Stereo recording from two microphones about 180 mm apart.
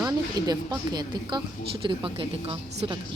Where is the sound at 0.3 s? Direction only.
20° right (ahead or behind).